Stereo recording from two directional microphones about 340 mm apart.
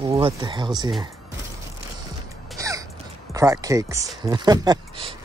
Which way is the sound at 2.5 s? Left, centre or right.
Centre.